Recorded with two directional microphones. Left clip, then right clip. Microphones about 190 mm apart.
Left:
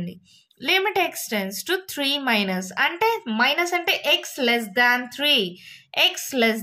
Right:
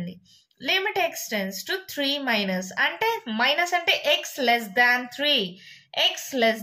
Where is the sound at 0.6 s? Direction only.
40° left (ahead or behind).